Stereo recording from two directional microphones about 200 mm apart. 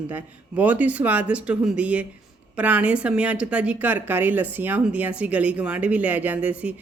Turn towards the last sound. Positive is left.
turn(degrees=-5)  # may be behind; listen again after turning